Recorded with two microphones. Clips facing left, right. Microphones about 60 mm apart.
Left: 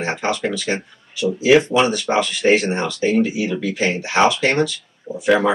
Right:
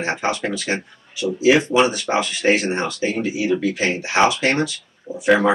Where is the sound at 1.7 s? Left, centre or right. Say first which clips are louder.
Even; centre.